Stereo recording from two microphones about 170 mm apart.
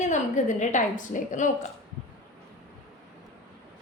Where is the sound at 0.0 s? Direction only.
45° left (ahead or behind).